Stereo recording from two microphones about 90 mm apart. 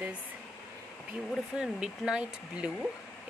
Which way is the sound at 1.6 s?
10° right (ahead or behind).